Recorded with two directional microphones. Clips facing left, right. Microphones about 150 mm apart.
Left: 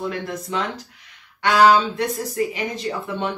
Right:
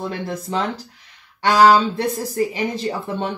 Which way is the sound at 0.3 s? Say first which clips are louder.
Right 2 dB; 35° right (ahead or behind).